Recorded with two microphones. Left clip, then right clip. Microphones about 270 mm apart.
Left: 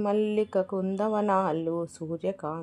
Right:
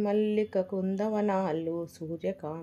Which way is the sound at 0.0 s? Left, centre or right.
Left.